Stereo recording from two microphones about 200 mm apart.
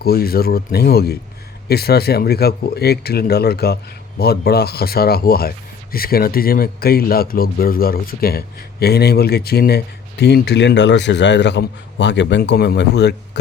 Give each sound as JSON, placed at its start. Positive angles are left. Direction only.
{"t": 0.0, "sound": "speech", "side_deg": 50}